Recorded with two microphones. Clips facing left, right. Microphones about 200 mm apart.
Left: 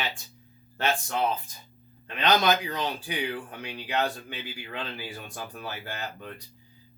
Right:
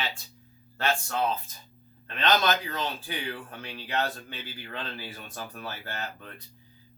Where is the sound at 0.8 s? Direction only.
15° left (ahead or behind).